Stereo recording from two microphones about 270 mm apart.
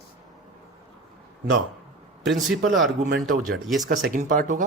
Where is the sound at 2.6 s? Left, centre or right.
Right.